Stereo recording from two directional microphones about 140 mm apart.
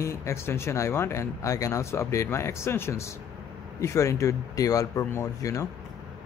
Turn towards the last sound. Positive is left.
turn(degrees=20)  # may be behind; listen again after turning